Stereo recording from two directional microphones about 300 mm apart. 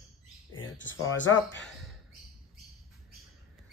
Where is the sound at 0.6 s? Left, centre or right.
Left.